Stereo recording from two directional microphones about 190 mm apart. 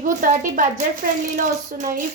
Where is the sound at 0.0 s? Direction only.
45° right (ahead or behind).